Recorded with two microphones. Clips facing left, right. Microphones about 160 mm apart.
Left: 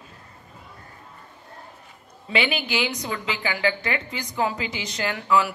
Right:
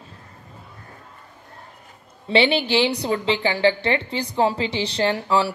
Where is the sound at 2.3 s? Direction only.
30° right (ahead or behind).